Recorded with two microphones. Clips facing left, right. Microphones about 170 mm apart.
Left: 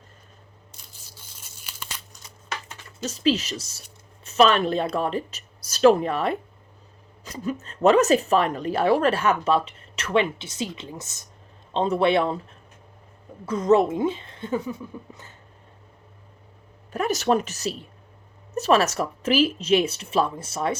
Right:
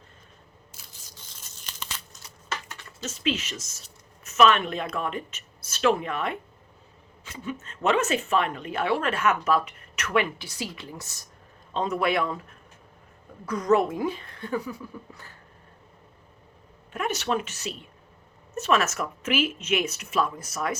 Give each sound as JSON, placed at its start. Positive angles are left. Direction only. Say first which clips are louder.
{"t": 1.0, "sound": "tearing", "louder": "even", "side_deg": 10}
{"t": 3.0, "sound": "speech", "louder": "left 6 dB", "side_deg": 35}
{"t": 16.9, "sound": "speech", "louder": "left 5 dB", "side_deg": 40}